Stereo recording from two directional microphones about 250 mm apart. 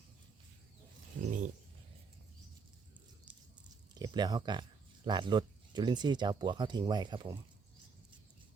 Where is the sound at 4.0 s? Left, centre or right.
Centre.